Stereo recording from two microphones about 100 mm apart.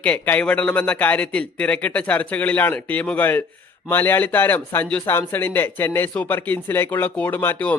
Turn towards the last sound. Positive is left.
turn(degrees=15)  # may be behind; listen again after turning